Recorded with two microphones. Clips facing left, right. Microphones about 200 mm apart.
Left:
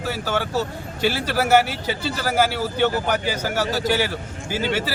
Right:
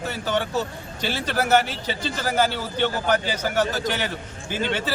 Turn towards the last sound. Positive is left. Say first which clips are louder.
# left 2 dB
turn(degrees=10)  # may be behind; listen again after turning